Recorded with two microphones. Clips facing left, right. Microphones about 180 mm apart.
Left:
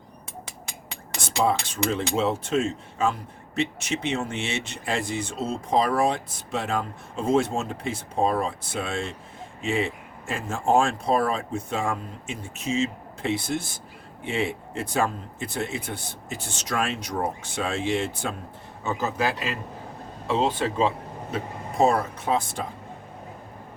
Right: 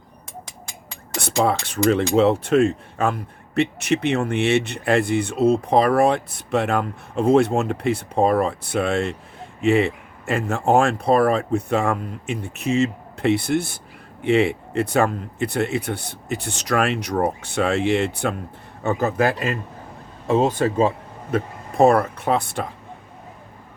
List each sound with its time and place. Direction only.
1.2 s speech: 65° right (ahead or behind); by 20.9 s 45° right (ahead or behind)
21.3 s speech: 60° right (ahead or behind)